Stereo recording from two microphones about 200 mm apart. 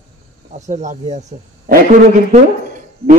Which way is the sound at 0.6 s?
35° right (ahead or behind).